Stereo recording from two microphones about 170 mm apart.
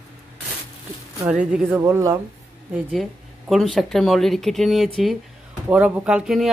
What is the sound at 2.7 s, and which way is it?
Speech, centre (ahead or behind).